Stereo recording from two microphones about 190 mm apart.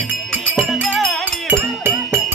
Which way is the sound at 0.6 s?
Centre (ahead or behind).